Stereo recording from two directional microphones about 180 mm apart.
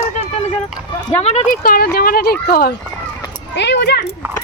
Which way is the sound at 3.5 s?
80° left.